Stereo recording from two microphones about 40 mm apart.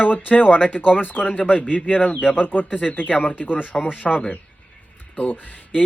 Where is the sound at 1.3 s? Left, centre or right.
Left.